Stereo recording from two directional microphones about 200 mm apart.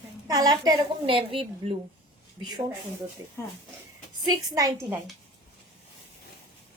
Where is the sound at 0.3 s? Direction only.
20° right (ahead or behind).